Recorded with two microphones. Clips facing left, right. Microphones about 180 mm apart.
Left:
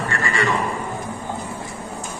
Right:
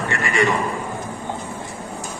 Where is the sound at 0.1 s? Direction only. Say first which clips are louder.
Right 3 dB; 20° right (ahead or behind).